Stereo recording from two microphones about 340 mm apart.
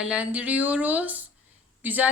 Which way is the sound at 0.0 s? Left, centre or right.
Centre.